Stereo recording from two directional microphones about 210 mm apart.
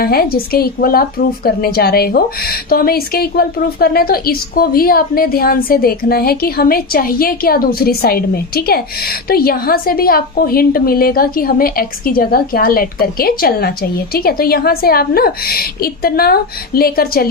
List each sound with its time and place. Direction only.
0.0 s a woman's voice: 45° left (ahead or behind)